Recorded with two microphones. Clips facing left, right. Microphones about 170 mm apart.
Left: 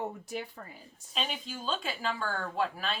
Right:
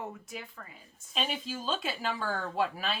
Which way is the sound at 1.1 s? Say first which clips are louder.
Right 2 dB; 5° right (ahead or behind).